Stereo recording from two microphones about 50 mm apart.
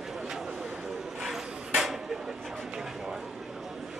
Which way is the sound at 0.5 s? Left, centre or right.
Right.